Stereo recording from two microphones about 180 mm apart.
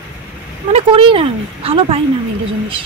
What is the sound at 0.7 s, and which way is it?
Speech, 30° right (ahead or behind).